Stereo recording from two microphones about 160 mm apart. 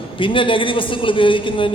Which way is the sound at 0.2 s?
30° left (ahead or behind).